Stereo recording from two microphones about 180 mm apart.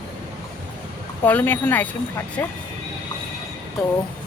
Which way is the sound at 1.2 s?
10° left (ahead or behind).